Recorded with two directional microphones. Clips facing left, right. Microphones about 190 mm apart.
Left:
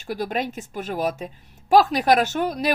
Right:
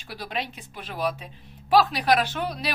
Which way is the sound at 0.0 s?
45° left (ahead or behind).